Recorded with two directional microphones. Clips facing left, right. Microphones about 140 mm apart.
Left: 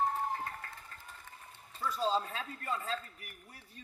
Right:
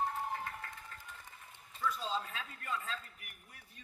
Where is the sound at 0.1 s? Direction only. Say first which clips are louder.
Left 3 dB; 35° left (ahead or behind).